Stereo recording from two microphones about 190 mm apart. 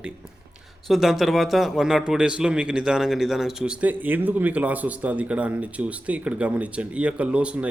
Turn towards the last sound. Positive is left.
turn(degrees=-5)  # may be behind; listen again after turning